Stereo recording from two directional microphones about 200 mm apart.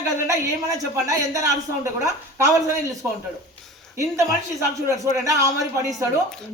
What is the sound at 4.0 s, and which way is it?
A woman's voice, 15° right (ahead or behind).